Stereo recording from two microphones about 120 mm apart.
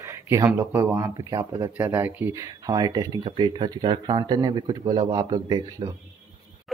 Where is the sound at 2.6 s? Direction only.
35° right (ahead or behind).